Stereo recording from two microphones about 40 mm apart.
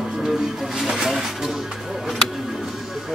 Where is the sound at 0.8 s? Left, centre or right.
Centre.